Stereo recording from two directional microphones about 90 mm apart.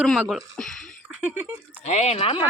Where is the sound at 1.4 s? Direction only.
20° right (ahead or behind).